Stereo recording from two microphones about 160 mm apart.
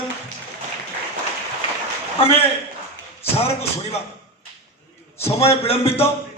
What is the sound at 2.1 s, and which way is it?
Speech, 35° left (ahead or behind).